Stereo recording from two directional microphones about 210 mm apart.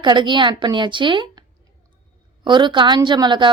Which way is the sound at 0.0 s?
20° right (ahead or behind).